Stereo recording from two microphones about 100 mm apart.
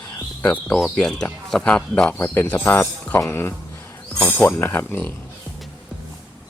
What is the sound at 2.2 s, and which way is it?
Speech, 25° left (ahead or behind).